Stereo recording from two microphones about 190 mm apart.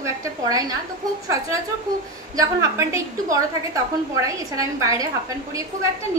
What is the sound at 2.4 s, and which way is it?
A woman's voice, 15° right (ahead or behind).